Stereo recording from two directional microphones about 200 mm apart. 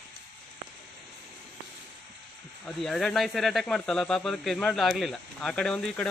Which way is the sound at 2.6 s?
Centre (ahead or behind).